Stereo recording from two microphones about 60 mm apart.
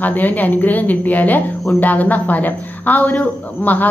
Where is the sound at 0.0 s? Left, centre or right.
Left.